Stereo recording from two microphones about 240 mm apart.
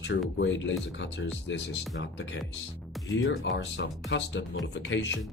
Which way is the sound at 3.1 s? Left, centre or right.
Left.